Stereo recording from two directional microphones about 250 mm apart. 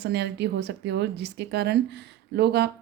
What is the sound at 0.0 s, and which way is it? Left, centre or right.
Speech, right.